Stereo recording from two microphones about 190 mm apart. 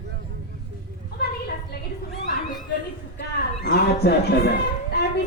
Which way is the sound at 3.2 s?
60° left (ahead or behind).